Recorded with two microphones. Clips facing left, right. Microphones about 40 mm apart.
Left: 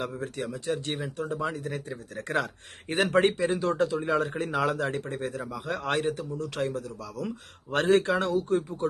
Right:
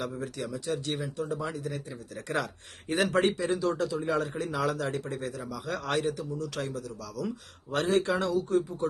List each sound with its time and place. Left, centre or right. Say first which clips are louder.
0.2 s speech: left 1 dB; left